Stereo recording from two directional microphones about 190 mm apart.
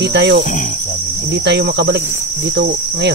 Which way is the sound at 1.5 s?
65° right (ahead or behind).